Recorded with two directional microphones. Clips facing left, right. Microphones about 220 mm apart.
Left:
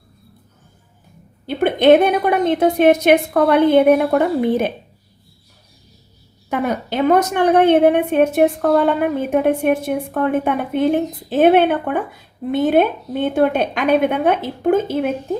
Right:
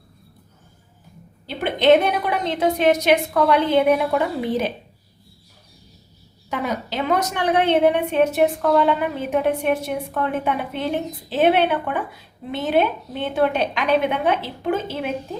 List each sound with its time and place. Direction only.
1.5 s a woman's voice: 55° left (ahead or behind)
6.5 s a woman's voice: 55° left (ahead or behind)